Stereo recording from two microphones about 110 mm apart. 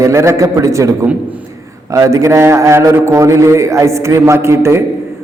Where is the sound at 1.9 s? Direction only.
30° right (ahead or behind).